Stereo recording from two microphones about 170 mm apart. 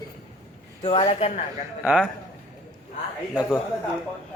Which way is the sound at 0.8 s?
35° left (ahead or behind).